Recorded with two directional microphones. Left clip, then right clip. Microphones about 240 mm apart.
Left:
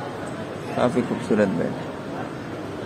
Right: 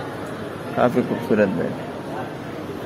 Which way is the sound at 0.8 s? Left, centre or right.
Centre.